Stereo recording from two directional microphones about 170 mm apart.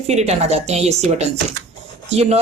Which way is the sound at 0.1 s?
40° right (ahead or behind).